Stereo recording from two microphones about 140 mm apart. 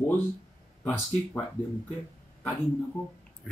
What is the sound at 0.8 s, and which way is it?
Speech, 15° left (ahead or behind).